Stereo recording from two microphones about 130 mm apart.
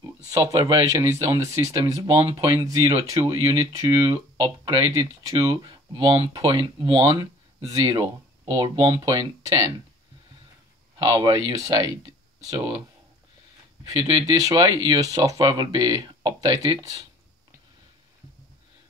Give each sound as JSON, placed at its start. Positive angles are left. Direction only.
{"t": 0.3, "sound": "speech", "side_deg": -30}
{"t": 11.0, "sound": "speech", "side_deg": -30}
{"t": 13.8, "sound": "speech", "side_deg": -30}